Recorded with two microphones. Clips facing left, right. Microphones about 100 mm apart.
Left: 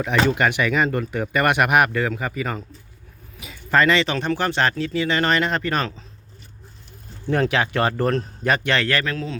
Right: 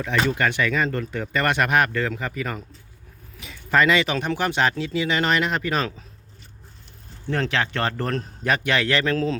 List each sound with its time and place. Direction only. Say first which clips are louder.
0.3 s speech: left 2 dB; 15° left (ahead or behind); by 6.1 s 5° right (ahead or behind)
7.3 s speech: left 4 dB; 10° left (ahead or behind); by 8.9 s 5° right (ahead or behind)
9.0 s speech: right 4 dB; 35° right (ahead or behind)